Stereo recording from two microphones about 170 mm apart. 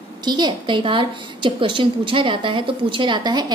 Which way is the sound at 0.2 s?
25° right (ahead or behind).